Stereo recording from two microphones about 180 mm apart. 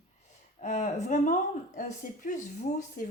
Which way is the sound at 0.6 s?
40° left (ahead or behind).